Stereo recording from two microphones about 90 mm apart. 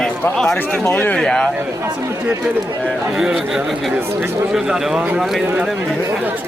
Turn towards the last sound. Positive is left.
turn(degrees=-5)  # may be behind; listen again after turning